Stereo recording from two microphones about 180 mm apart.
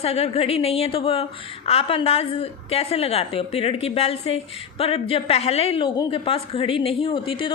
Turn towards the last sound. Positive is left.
turn(degrees=30)  # may be behind; listen again after turning